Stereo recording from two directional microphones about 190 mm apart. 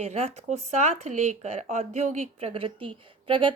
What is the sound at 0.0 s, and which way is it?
Speech, 35° right (ahead or behind).